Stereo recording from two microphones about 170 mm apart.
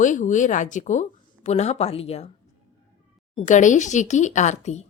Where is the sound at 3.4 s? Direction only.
45° left (ahead or behind).